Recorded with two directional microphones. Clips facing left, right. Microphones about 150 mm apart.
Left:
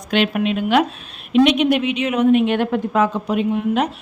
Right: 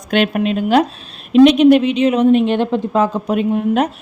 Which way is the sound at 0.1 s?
45° right (ahead or behind).